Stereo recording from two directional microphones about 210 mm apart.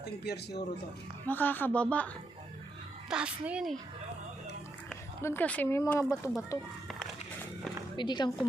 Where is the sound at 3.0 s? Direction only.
5° right (ahead or behind).